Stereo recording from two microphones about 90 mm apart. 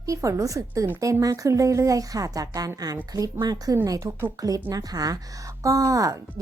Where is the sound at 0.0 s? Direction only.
35° right (ahead or behind).